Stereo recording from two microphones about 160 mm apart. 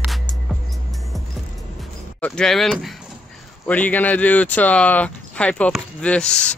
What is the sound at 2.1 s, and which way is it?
Speech, 5° left (ahead or behind).